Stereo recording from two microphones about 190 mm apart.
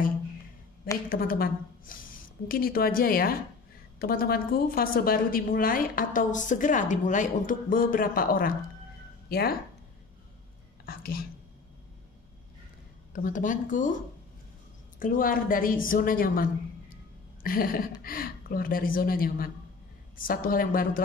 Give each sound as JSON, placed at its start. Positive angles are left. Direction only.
{"t": 1.0, "sound": "a woman's voice", "side_deg": 50}
{"t": 10.9, "sound": "a woman's voice", "side_deg": 50}
{"t": 13.1, "sound": "a woman's voice", "side_deg": 45}